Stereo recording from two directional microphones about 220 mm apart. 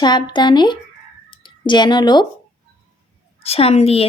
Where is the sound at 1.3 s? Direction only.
20° left (ahead or behind).